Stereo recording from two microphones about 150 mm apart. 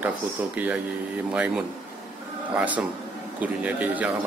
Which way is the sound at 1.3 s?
10° right (ahead or behind).